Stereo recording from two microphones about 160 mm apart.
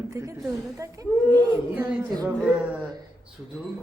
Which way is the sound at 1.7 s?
10° right (ahead or behind).